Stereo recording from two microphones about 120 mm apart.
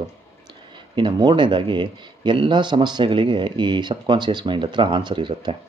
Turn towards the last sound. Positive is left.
turn(degrees=-40)  # may be behind; listen again after turning